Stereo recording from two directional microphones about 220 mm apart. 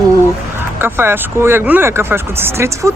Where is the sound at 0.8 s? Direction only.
10° right (ahead or behind).